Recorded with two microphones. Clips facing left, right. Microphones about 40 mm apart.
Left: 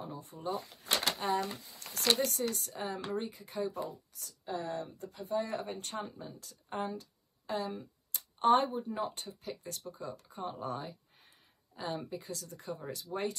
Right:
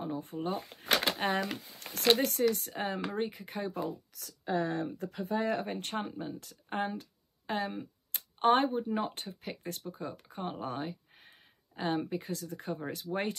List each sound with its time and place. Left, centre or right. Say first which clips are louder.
0.0 s speech: right 5 dB; right